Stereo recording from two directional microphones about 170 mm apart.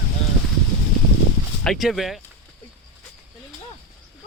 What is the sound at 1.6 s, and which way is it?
Speech, centre (ahead or behind).